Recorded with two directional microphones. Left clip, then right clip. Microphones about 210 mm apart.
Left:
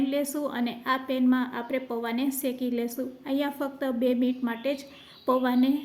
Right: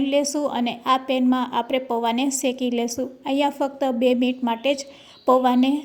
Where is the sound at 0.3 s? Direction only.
25° right (ahead or behind).